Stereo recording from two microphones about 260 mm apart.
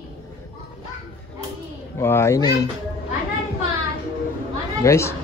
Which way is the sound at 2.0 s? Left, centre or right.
Centre.